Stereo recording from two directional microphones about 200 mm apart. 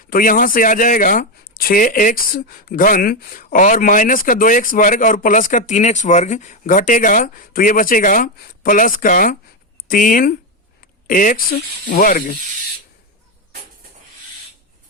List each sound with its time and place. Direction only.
0.1 s speech: 45° left (ahead or behind)